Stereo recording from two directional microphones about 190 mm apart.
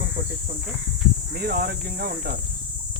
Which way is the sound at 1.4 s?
55° right (ahead or behind).